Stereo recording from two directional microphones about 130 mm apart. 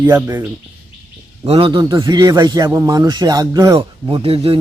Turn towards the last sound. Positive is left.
turn(degrees=-45)  # may be behind; listen again after turning